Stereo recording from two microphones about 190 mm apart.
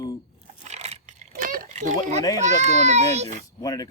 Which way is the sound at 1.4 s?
40° right (ahead or behind).